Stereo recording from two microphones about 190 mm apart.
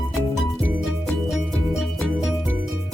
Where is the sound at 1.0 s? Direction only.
Centre (ahead or behind).